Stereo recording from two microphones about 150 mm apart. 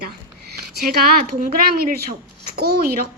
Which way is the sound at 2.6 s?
90° right.